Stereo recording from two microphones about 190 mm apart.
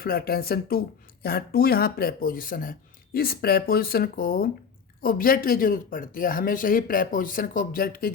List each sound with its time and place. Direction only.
0.0 s speech: 50° left (ahead or behind)